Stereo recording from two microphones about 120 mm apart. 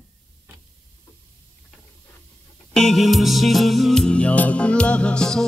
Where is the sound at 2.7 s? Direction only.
Centre (ahead or behind).